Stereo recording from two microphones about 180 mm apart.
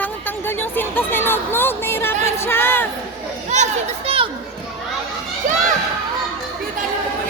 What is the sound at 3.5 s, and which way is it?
Children playing, 40° right (ahead or behind).